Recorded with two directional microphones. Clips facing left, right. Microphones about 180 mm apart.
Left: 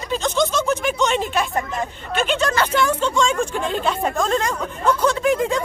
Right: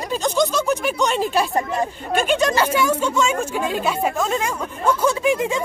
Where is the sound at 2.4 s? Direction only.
10° right (ahead or behind).